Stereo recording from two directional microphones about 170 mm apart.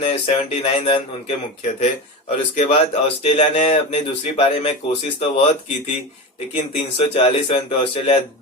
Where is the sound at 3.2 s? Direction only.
40° left (ahead or behind).